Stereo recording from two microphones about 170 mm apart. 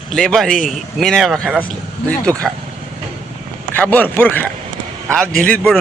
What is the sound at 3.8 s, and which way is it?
A man's voice, 10° left (ahead or behind).